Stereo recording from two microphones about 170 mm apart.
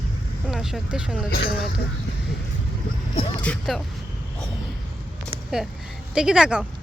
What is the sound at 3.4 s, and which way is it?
Speech, 5° left (ahead or behind).